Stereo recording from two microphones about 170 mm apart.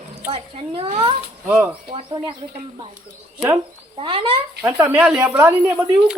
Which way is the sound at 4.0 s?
30° right (ahead or behind).